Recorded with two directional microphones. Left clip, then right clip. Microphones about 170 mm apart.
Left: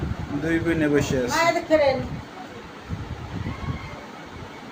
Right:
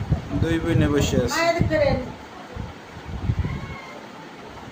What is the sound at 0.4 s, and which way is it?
Speech, 10° right (ahead or behind).